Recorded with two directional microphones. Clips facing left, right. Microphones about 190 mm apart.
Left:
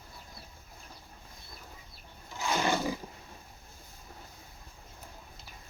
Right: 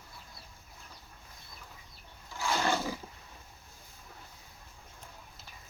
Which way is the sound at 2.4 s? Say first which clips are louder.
Left 1 dB; 15° left (ahead or behind).